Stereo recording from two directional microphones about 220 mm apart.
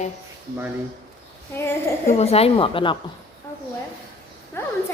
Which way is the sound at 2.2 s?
30° left (ahead or behind).